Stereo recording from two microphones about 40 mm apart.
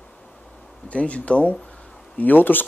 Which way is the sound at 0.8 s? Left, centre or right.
Left.